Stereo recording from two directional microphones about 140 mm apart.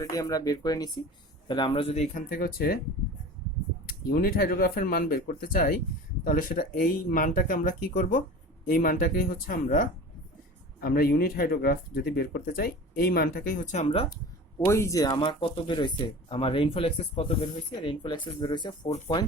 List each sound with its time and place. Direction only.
0.0 s speech: 25° left (ahead or behind); by 2.0 s 45° left (ahead or behind)
2.1 s speech: 90° left
4.1 s speech: 90° left; by 13.8 s 70° left (ahead or behind)
14.7 s speech: 20° left (ahead or behind)